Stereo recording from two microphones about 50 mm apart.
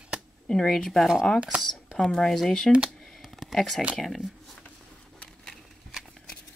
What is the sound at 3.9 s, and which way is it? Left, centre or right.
Speech, centre.